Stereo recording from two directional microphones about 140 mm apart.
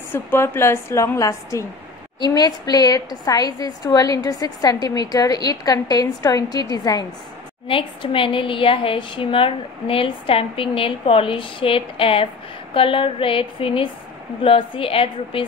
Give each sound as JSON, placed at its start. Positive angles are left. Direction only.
{"t": 0.1, "sound": "a woman's voice", "side_deg": 15}
{"t": 7.6, "sound": "a woman's voice", "side_deg": 40}